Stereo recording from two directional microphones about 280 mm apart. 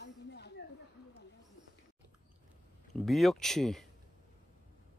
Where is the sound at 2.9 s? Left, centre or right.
Centre.